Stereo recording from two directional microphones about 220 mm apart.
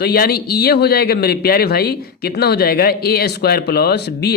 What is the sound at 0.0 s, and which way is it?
Speech, 45° left (ahead or behind).